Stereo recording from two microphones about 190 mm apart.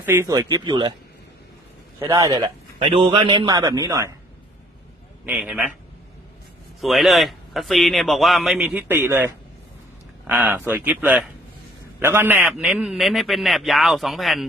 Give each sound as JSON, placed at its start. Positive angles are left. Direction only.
{"t": 0.0, "sound": "a man's voice", "side_deg": -15}
{"t": 2.0, "sound": "a man's voice", "side_deg": -20}
{"t": 5.2, "sound": "a man's voice", "side_deg": -5}
{"t": 6.8, "sound": "a man's voice", "side_deg": 0}
{"t": 8.9, "sound": "a man's voice", "side_deg": -10}